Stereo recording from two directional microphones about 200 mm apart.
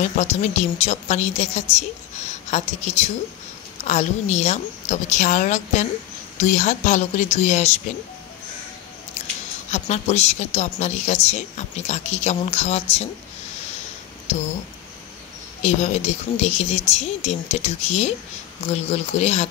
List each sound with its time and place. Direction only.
0.0 s a woman's voice: 35° left (ahead or behind)
9.7 s a woman's voice: 35° left (ahead or behind)
15.6 s a woman's voice: 35° left (ahead or behind)